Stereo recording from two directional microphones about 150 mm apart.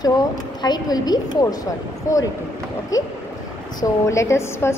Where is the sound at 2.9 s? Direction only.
25° left (ahead or behind).